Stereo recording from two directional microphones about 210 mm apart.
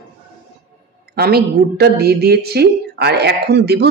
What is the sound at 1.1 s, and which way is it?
Speech, 45° right (ahead or behind).